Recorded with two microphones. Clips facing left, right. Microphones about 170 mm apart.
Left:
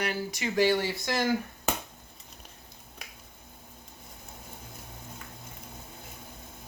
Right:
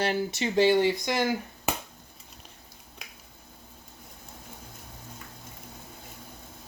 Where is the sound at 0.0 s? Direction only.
25° right (ahead or behind).